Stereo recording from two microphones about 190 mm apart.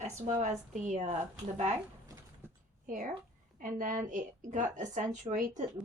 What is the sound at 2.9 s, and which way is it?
A woman's voice, 45° right (ahead or behind).